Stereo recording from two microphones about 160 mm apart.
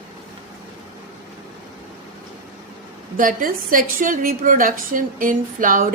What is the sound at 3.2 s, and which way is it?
A woman's voice, 60° right (ahead or behind).